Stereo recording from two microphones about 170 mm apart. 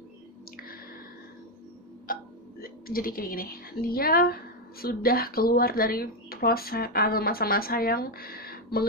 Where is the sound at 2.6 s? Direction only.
60° left (ahead or behind).